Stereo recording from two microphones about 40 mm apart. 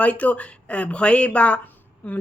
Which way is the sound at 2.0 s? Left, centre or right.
Left.